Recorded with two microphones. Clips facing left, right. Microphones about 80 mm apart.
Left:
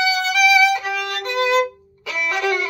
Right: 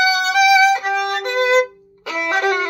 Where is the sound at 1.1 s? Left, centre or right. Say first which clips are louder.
Right 1 dB; right.